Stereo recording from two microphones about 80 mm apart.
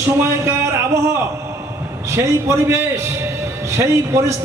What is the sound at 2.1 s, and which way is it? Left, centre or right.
A man's voice, right.